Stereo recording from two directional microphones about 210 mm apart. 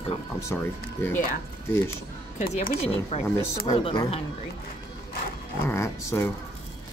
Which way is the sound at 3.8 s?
25° left (ahead or behind).